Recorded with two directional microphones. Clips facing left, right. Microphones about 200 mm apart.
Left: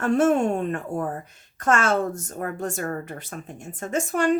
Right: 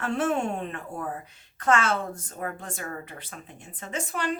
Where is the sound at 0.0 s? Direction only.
45° left (ahead or behind).